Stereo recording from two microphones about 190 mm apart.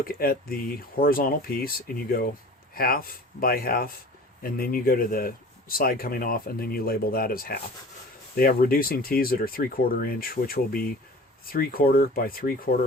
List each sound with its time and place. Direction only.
0.0 s speech: 50° left (ahead or behind)